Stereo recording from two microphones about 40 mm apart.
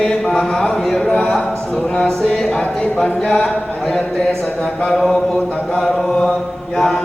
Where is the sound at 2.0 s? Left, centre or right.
Centre.